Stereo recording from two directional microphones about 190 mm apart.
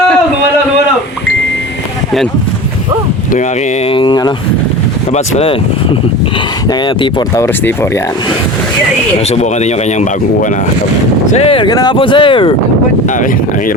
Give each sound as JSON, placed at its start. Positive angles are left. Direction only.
{"t": 3.8, "sound": "speech", "side_deg": 25}
{"t": 6.8, "sound": "speech", "side_deg": 25}
{"t": 9.3, "sound": "speech", "side_deg": 35}
{"t": 11.3, "sound": "speech", "side_deg": 30}